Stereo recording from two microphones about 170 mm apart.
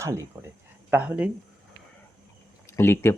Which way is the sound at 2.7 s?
15° left (ahead or behind).